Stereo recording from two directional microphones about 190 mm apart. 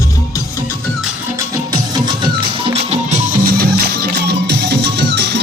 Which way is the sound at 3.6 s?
60° right (ahead or behind).